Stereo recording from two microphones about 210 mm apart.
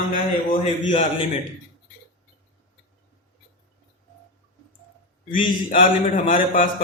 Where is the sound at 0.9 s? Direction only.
35° left (ahead or behind).